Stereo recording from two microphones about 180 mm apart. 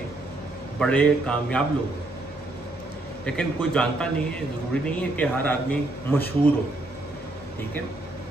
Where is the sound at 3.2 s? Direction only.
5° left (ahead or behind).